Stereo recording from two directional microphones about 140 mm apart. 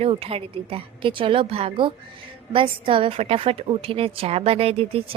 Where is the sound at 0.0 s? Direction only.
45° right (ahead or behind).